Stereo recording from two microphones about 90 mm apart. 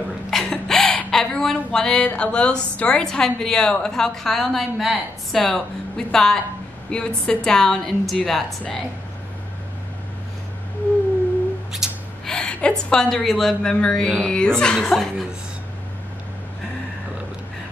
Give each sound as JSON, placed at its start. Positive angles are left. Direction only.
{"t": 0.3, "sound": "a woman's voice", "side_deg": 5}
{"t": 11.8, "sound": "gasp", "side_deg": -5}
{"t": 12.3, "sound": "a sound", "side_deg": 10}
{"t": 12.9, "sound": "a woman's voice", "side_deg": 5}